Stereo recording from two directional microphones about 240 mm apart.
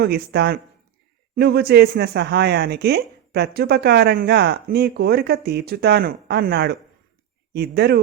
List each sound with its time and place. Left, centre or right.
0.0 s speech: right